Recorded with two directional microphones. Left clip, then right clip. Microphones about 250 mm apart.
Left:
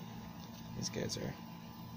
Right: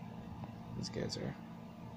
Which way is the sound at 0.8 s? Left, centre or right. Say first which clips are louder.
Left 1 dB; centre.